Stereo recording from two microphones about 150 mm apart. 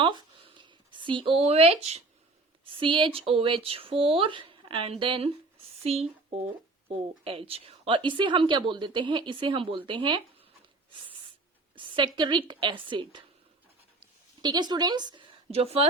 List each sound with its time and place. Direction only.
0.0 s a sound: 30° right (ahead or behind)
2.6 s a woman's voice: 35° right (ahead or behind)
11.7 s a woman's voice: 35° right (ahead or behind)
14.4 s a woman's voice: 30° right (ahead or behind)